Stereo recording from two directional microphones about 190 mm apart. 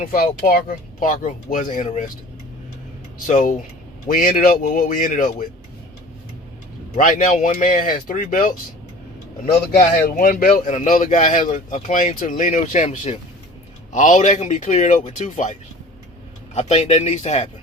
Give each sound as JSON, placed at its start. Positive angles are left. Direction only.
{"t": 0.0, "sound": "speech", "side_deg": 50}
{"t": 3.2, "sound": "speech", "side_deg": 45}
{"t": 6.9, "sound": "speech", "side_deg": 40}
{"t": 9.9, "sound": "speech", "side_deg": 50}
{"t": 16.6, "sound": "speech", "side_deg": 35}